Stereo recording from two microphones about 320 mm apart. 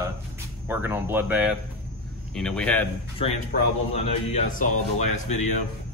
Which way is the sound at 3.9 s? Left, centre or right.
Left.